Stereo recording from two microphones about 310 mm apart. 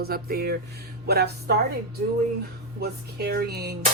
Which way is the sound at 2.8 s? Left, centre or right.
Right.